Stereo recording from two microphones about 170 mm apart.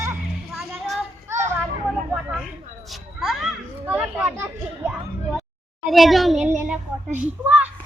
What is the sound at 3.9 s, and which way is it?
Children playing, 10° right (ahead or behind).